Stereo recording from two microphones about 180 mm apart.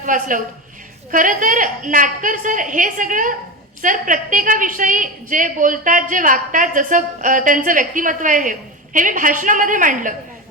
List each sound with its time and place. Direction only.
0.0 s a woman's voice: 45° right (ahead or behind)